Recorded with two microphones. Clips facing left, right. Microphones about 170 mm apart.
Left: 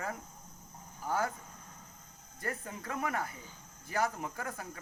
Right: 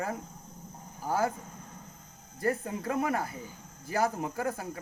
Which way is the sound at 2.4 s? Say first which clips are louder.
Right 9 dB; 30° right (ahead or behind).